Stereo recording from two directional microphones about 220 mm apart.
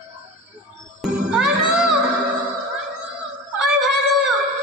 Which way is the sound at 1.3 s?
5° right (ahead or behind).